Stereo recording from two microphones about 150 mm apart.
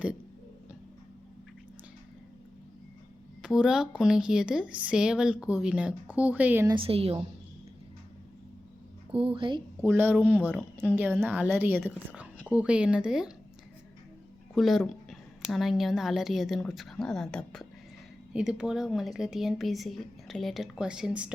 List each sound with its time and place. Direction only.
3.4 s speech: 5° right (ahead or behind)
6.7 s a woman's voice: 35° right (ahead or behind)
9.1 s a woman's voice: 35° right (ahead or behind)
9.8 s a woman's voice: 15° right (ahead or behind)
14.5 s speech: centre (ahead or behind)